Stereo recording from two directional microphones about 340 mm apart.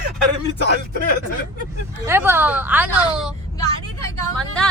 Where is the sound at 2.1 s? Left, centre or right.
Centre.